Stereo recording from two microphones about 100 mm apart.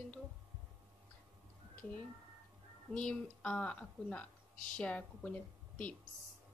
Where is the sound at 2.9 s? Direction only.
10° left (ahead or behind).